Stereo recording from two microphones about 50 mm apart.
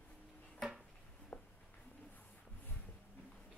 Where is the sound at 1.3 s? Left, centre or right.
Left.